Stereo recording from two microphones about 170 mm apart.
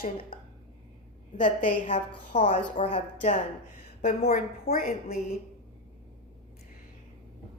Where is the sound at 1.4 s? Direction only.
50° left (ahead or behind).